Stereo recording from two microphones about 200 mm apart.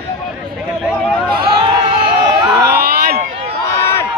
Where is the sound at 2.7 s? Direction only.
55° right (ahead or behind).